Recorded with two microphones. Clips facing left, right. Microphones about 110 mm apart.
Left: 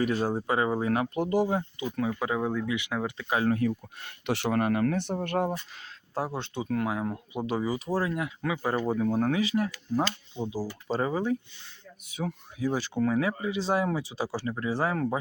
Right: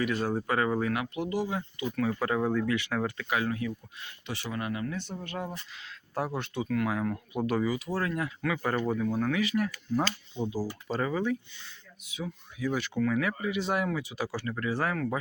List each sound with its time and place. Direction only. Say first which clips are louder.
0.0 s speech: left 2 dB; 35° left (ahead or behind)
0.3 s speech: left 1 dB; 20° left (ahead or behind); by 1.9 s 40° left (ahead or behind)
2.0 s speech: even; 10° left (ahead or behind)
3.2 s speech: left 4 dB; 35° left (ahead or behind)
3.7 s speech: left 5 dB; 60° left (ahead or behind)
6.1 s speech: even; 25° left (ahead or behind)
9.0 s speech: left 3 dB; 40° left (ahead or behind)
10.3 s speech: even; 15° left (ahead or behind)
10.8 s speech: left 3 dB; 30° left (ahead or behind)
12.2 s speech: left 4 dB; 45° left (ahead or behind)
12.5 s speech: left 1 dB; 30° left (ahead or behind)